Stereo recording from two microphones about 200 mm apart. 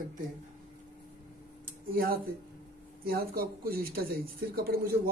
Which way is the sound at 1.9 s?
45° right (ahead or behind).